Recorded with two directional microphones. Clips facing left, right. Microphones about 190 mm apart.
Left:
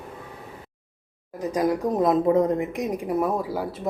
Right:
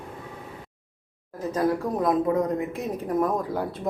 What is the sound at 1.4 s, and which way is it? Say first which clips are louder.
A woman's voice: left 1 dB; 15° left (ahead or behind).